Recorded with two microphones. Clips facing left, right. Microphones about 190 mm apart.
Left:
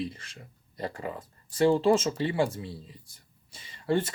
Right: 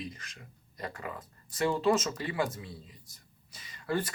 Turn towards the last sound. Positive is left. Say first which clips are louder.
# left 5 dB
turn(degrees=25)  # may be behind; listen again after turning